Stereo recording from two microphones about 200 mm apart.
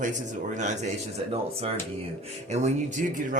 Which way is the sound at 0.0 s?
40° right (ahead or behind).